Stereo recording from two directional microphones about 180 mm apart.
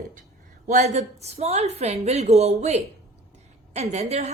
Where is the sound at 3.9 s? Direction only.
35° right (ahead or behind).